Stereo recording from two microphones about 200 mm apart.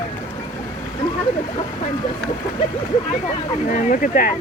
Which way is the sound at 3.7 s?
40° left (ahead or behind).